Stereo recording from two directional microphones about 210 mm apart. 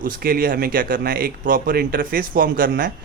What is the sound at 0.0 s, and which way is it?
Speech, 45° right (ahead or behind).